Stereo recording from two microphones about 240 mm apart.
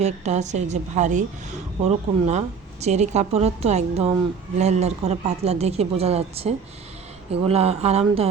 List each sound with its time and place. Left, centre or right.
0.0 s a woman's voice: right